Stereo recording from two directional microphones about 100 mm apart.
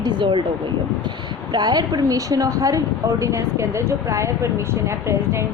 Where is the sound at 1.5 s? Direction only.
45° right (ahead or behind).